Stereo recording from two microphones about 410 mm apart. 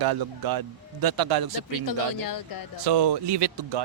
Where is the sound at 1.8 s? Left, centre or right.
Left.